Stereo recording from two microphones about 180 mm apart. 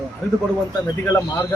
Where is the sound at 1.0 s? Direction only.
15° left (ahead or behind).